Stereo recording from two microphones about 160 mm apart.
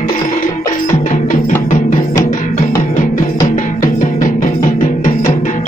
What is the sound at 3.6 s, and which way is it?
Music, 55° left (ahead or behind).